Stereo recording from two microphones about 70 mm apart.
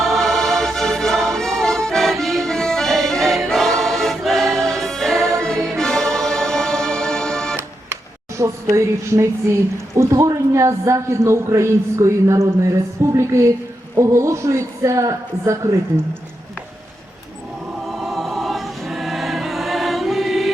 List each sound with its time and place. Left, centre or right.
0.0 s music: centre
8.4 s a woman's voice: right
18.0 s choir: centre